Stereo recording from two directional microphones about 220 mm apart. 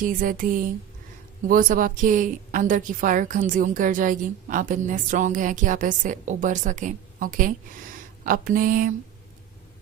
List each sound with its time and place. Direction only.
0.0 s a woman's voice: 40° right (ahead or behind)